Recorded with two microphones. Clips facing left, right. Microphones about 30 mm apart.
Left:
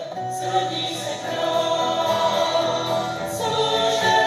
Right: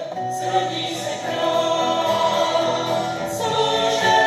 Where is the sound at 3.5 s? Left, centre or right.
Right.